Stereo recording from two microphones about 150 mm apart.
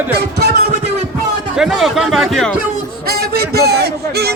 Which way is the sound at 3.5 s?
90° right.